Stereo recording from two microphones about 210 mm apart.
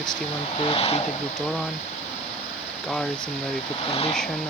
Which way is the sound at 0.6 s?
25° left (ahead or behind).